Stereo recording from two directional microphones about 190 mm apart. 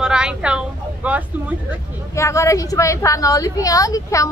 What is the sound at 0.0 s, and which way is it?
Speech, 5° right (ahead or behind).